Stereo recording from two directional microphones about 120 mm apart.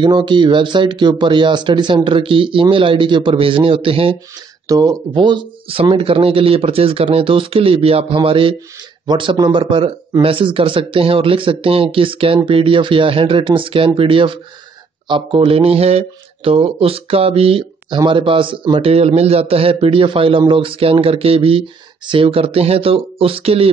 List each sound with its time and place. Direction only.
0.0 s speech: 40° right (ahead or behind)
4.6 s speech: 30° right (ahead or behind); by 23.7 s 55° right (ahead or behind)